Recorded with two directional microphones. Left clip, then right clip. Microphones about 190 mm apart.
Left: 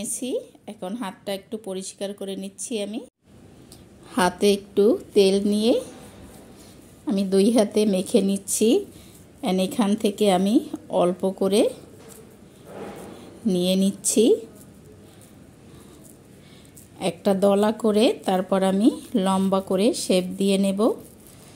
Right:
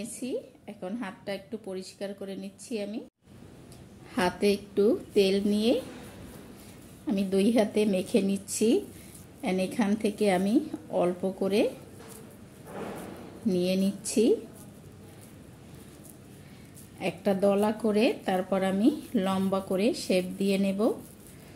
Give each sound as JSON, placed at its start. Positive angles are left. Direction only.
{"t": 0.0, "sound": "speech", "side_deg": 40}
{"t": 4.1, "sound": "speech", "side_deg": 35}
{"t": 7.1, "sound": "speech", "side_deg": 35}
{"t": 13.5, "sound": "speech", "side_deg": 35}
{"t": 17.0, "sound": "speech", "side_deg": 40}